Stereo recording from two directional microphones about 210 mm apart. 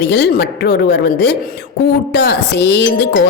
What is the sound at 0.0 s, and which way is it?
Speech, 55° left (ahead or behind).